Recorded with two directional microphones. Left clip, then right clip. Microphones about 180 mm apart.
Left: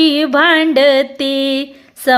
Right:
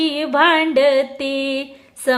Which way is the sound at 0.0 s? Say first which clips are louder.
Left 4 dB; 30° left (ahead or behind).